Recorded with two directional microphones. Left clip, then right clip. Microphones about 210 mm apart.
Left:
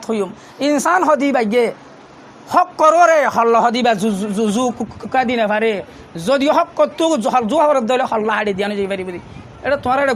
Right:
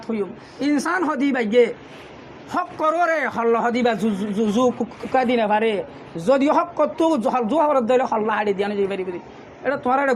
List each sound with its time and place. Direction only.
0.1 s a man's voice: 40° left (ahead or behind)